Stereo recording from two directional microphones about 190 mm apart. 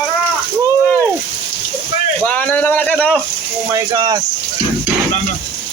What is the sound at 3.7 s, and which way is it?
Speech, 20° right (ahead or behind).